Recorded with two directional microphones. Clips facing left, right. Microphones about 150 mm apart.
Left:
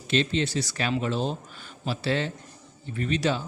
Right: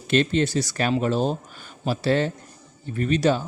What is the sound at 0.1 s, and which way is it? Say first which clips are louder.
Speech: right 5 dB; 50° right (ahead or behind).